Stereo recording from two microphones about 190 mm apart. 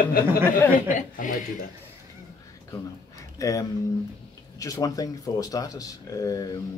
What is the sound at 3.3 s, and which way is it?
Speech, 15° left (ahead or behind).